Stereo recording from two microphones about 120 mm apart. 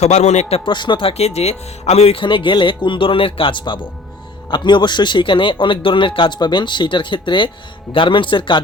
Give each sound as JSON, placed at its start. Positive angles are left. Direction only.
{"t": 0.0, "sound": "speech", "side_deg": 70}
{"t": 0.6, "sound": "speech", "side_deg": 40}
{"t": 2.2, "sound": "speech", "side_deg": 45}